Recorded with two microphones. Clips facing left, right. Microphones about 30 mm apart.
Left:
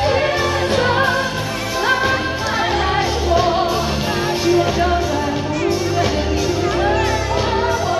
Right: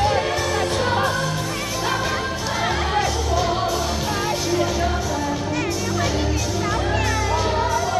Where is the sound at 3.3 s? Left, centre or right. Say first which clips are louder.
Left 5 dB; left.